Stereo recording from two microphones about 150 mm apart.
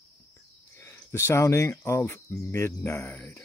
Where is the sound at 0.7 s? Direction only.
15° left (ahead or behind).